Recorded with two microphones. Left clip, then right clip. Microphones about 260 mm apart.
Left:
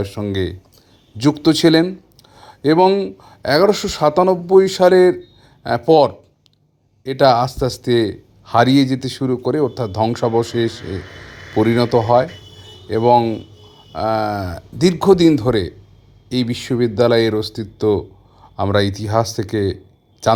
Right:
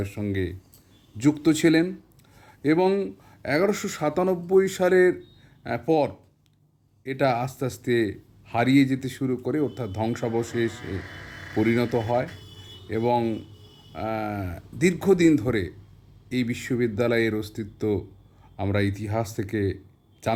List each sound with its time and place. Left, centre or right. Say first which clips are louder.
0.0 s speech: left 8 dB; centre
7.0 s speech: left 11 dB; centre
18.8 s speech: left 10 dB; centre
19.4 s speech: left 8 dB; centre